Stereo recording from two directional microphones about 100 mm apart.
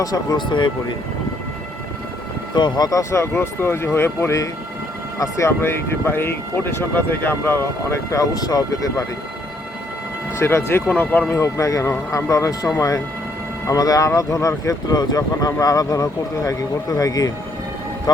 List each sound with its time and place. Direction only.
0.0 s speech: 40° left (ahead or behind)
2.6 s speech: 45° left (ahead or behind)
10.3 s speech: 25° left (ahead or behind)